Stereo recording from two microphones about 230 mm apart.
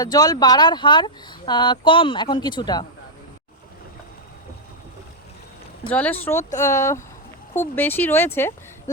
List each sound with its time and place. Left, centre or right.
0.0 s speech: centre
5.9 s speech: centre